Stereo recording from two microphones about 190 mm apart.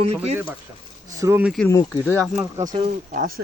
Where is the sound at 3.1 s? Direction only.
45° right (ahead or behind).